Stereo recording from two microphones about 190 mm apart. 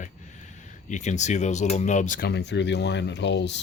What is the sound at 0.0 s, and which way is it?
Speech, 40° left (ahead or behind).